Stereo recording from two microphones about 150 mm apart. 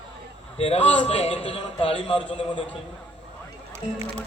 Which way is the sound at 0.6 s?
40° left (ahead or behind).